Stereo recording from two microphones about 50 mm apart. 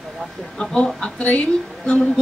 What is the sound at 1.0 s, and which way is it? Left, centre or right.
Speech, left.